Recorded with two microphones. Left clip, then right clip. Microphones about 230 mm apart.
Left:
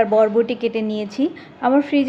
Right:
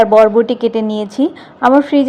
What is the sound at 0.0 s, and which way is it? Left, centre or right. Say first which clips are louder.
A woman's voice: right 7 dB; centre.